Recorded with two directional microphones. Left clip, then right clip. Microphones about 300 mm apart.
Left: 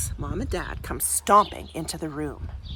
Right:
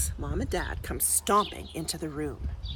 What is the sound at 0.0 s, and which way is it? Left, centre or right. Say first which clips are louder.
Speech: left 2 dB; centre.